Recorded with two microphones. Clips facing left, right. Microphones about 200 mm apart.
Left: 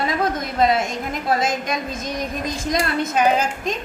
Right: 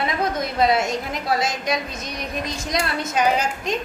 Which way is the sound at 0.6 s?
50° left (ahead or behind).